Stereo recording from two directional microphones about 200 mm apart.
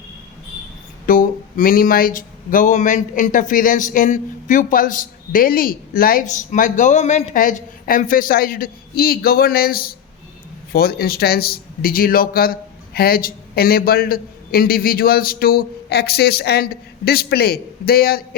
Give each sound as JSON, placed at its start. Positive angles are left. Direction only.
{"t": 1.0, "sound": "speech", "side_deg": 45}